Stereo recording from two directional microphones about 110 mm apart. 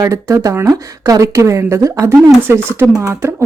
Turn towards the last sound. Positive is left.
turn(degrees=-25)  # may be behind; listen again after turning